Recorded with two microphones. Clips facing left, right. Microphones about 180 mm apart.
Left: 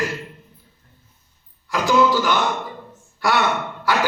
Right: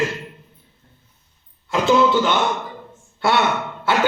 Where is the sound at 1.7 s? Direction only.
25° right (ahead or behind).